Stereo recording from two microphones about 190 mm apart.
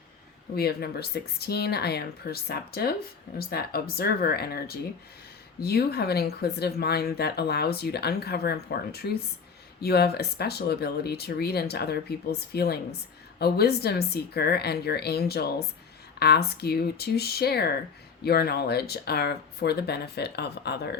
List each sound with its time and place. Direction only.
0.5 s speech: 55° left (ahead or behind)